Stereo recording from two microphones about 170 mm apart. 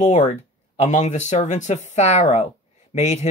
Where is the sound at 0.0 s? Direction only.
40° left (ahead or behind).